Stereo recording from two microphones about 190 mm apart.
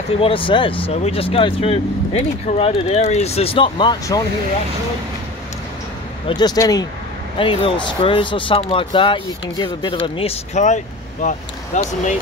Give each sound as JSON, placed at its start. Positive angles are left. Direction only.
{"t": 0.2, "sound": "speech", "side_deg": 30}
{"t": 6.2, "sound": "speech", "side_deg": 20}